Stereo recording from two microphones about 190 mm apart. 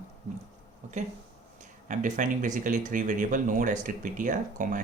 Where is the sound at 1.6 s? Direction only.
40° right (ahead or behind).